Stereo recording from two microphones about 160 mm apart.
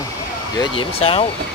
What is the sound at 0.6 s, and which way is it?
Speech, 35° left (ahead or behind).